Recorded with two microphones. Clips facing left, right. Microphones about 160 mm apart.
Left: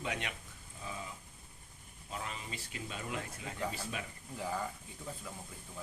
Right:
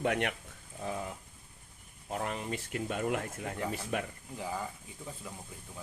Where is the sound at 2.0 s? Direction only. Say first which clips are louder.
Right 8 dB; 55° right (ahead or behind).